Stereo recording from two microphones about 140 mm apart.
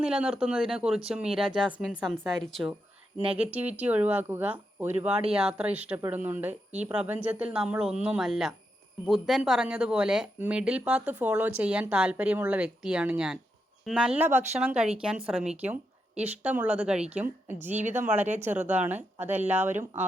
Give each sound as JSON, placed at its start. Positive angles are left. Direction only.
{"t": 0.0, "sound": "speech", "side_deg": -5}
{"t": 3.7, "sound": "speech", "side_deg": -10}
{"t": 14.2, "sound": "speech", "side_deg": -15}
{"t": 17.7, "sound": "speech", "side_deg": -55}
{"t": 17.9, "sound": "speech", "side_deg": -15}